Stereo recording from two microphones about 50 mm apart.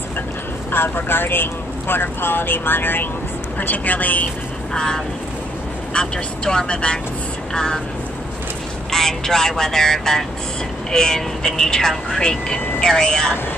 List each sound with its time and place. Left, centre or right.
0.7 s a woman's voice: left
4.7 s speech: centre
8.9 s speech: centre